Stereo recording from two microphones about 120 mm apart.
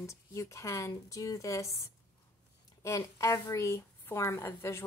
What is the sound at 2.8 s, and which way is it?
Speech, 25° left (ahead or behind).